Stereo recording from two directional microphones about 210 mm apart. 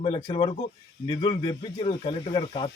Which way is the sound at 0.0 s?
25° left (ahead or behind).